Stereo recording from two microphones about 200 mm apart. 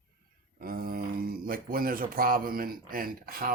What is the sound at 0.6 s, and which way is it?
Speech, 45° right (ahead or behind).